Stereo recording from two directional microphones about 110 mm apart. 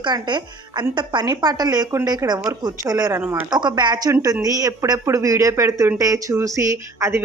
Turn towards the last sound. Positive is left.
turn(degrees=-25)  # may be behind; listen again after turning